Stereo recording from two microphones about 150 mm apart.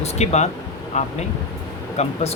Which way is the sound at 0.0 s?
50° left (ahead or behind).